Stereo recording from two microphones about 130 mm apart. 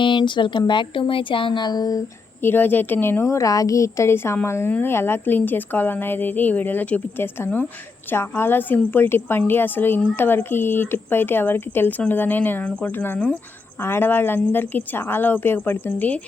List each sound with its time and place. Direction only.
0.0 s speech: 35° left (ahead or behind)
2.4 s a woman's voice: 15° left (ahead or behind)